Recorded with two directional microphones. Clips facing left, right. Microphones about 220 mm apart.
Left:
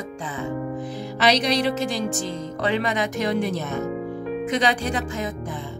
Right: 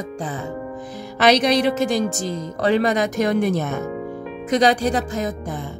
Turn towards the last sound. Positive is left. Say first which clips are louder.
# right 5 dB
turn(degrees=-40)  # may be behind; listen again after turning